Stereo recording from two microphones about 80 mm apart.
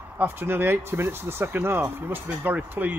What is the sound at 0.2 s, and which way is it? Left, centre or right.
Speech, right.